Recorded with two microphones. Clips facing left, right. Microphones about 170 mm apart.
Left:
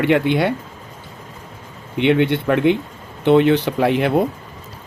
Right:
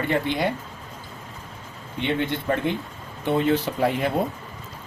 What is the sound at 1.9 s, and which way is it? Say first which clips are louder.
Speech: left 9 dB; 75° left (ahead or behind).